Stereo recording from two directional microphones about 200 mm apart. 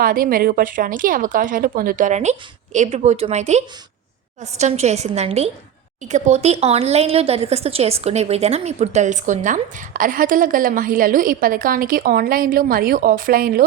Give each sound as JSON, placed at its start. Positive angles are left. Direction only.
{"t": 0.0, "sound": "a woman's voice", "side_deg": -45}